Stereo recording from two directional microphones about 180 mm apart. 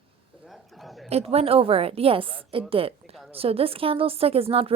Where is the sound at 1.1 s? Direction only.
35° right (ahead or behind).